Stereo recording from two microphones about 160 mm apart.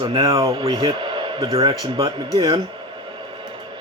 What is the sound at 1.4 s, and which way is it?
Speech, 20° right (ahead or behind).